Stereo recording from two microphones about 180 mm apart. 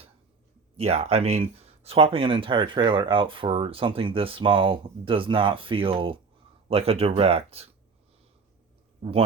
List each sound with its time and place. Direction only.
0.8 s speech: 35° right (ahead or behind)